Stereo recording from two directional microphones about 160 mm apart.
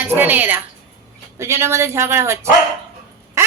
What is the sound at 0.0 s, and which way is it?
A woman's voice, 10° right (ahead or behind).